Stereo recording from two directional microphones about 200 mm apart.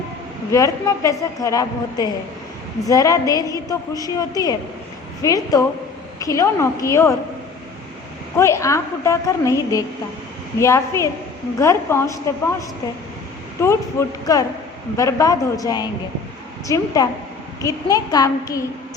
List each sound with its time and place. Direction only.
0.5 s a woman's voice: 15° left (ahead or behind)
8.4 s a woman's voice: 15° left (ahead or behind)